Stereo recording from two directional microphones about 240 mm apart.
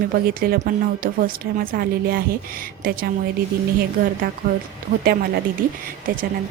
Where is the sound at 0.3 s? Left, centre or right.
Right.